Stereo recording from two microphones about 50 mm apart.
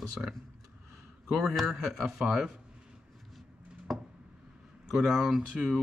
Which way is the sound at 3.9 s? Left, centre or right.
Centre.